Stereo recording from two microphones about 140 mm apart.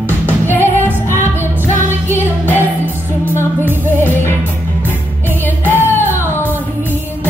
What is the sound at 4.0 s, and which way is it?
Music, 15° left (ahead or behind).